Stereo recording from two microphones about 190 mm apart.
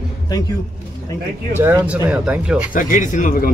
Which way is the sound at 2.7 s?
45° left (ahead or behind).